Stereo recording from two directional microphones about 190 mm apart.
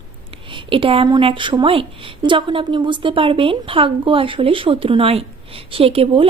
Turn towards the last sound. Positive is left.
turn(degrees=-30)  # may be behind; listen again after turning